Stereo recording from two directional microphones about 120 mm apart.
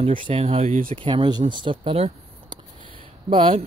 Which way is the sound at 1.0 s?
45° right (ahead or behind).